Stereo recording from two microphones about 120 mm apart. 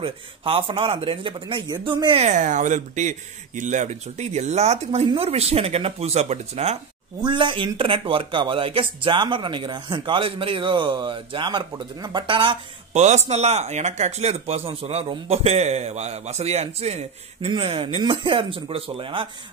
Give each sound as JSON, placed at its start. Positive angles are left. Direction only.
{"t": 0.0, "sound": "speech", "side_deg": -50}
{"t": 2.2, "sound": "speech", "side_deg": -90}
{"t": 7.2, "sound": "speech", "side_deg": -40}
{"t": 12.9, "sound": "speech", "side_deg": -70}
{"t": 17.6, "sound": "speech", "side_deg": -50}